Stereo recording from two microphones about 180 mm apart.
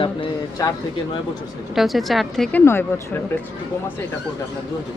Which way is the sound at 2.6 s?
15° left (ahead or behind).